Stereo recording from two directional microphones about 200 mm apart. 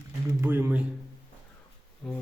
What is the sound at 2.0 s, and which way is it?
Speech, 5° left (ahead or behind).